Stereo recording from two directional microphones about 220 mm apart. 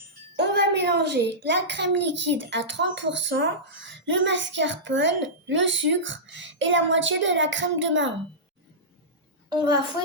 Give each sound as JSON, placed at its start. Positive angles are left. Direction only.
{"t": 0.3, "sound": "a child's voice", "side_deg": -50}